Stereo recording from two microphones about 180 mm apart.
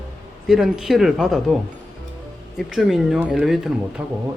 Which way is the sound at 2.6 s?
Centre (ahead or behind).